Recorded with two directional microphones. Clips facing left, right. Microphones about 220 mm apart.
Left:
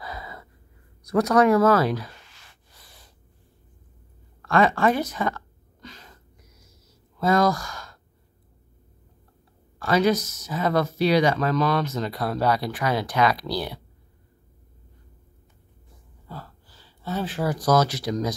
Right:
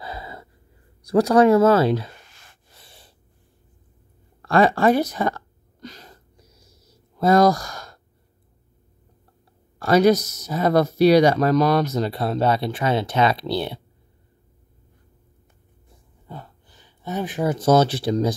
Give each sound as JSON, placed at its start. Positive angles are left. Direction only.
{"t": 0.0, "sound": "gasp", "side_deg": -30}
{"t": 1.0, "sound": "speech", "side_deg": -30}
{"t": 2.8, "sound": "snort", "side_deg": -30}
{"t": 4.4, "sound": "a sound", "side_deg": -35}
{"t": 7.2, "sound": "sigh", "side_deg": -40}
{"t": 9.8, "sound": "speech", "side_deg": -40}
{"t": 16.3, "sound": "speech", "side_deg": -20}